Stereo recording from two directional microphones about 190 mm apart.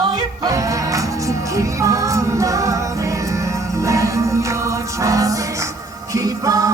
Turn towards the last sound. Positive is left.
turn(degrees=-15)  # may be behind; listen again after turning